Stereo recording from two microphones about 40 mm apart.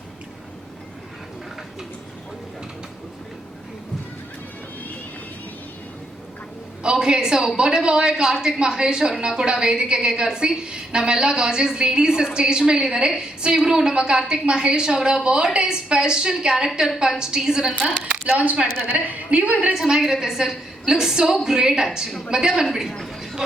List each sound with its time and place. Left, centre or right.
6.9 s a woman's voice: centre
17.7 s a woman's voice: right
19.9 s a woman's voice: centre